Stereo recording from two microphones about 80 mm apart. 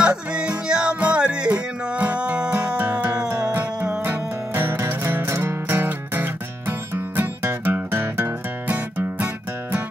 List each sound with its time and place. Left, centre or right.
0.0 s music: centre
4.0 s music: right